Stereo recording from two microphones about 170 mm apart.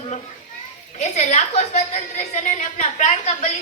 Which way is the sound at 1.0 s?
45° left (ahead or behind).